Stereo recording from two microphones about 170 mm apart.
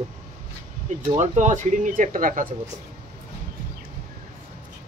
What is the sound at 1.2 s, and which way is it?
Speech, 45° right (ahead or behind).